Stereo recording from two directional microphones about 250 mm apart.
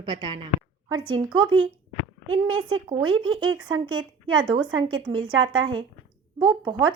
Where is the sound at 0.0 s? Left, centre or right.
Centre.